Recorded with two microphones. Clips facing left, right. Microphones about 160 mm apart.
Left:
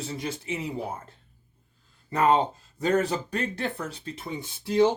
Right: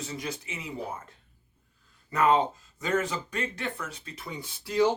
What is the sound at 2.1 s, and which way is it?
Speech, 30° left (ahead or behind).